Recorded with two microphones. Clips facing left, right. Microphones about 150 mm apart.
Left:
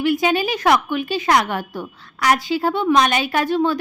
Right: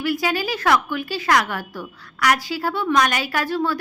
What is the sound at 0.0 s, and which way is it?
A woman's voice, 20° left (ahead or behind).